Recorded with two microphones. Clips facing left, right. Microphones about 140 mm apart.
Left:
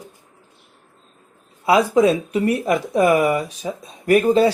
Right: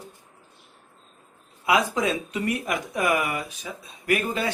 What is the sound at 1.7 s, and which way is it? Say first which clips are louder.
Speech: left 8 dB; 30° left (ahead or behind).